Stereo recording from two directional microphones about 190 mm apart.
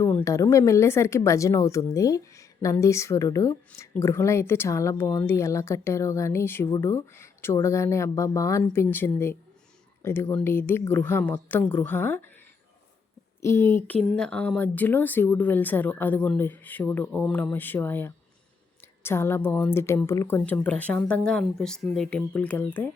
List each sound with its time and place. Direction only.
0.0 s speech: 10° left (ahead or behind)
13.4 s speech: 15° left (ahead or behind)